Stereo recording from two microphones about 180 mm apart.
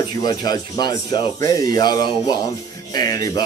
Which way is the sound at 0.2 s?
20° left (ahead or behind).